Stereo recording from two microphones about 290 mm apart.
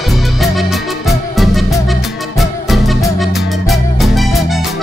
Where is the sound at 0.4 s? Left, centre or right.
Centre.